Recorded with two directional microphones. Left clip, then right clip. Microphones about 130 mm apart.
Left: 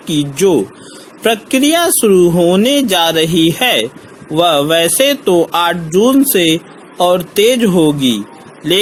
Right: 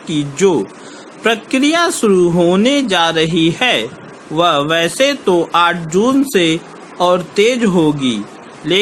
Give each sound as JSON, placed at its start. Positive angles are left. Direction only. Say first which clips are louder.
{"t": 0.1, "sound": "speech", "louder": "left 2 dB", "side_deg": 40}